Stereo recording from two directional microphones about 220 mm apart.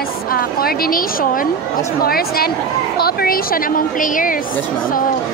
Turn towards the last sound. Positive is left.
turn(degrees=40)  # may be behind; listen again after turning